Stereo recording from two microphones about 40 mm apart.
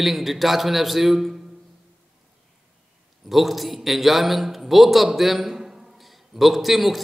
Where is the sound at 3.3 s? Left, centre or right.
Centre.